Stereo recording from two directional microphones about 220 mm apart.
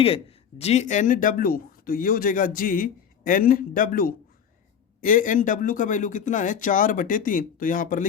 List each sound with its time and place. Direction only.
0.0 s speech: 25° left (ahead or behind)